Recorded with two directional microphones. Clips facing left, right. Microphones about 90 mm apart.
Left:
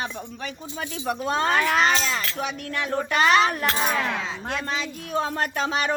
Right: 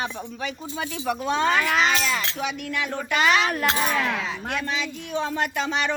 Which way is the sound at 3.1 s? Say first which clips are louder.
Left 2 dB; 40° left (ahead or behind).